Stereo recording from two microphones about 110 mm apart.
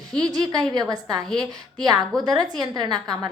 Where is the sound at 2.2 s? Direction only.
40° right (ahead or behind).